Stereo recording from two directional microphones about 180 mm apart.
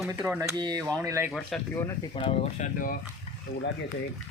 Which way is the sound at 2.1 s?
30° left (ahead or behind).